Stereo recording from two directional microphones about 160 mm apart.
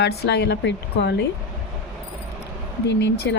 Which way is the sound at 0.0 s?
90° left.